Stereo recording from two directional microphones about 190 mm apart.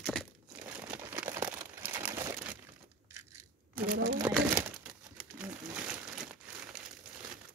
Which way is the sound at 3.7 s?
50° right (ahead or behind).